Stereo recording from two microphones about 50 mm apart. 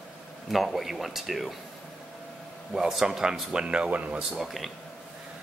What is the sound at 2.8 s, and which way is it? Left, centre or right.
Speech, centre.